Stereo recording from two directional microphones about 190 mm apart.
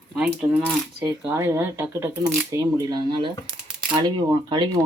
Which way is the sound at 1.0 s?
15° right (ahead or behind).